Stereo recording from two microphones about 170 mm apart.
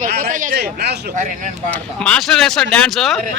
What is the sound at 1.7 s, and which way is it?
Speech, 5° left (ahead or behind).